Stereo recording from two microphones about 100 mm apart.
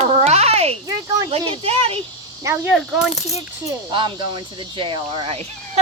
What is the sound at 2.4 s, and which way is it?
Speech, 25° right (ahead or behind).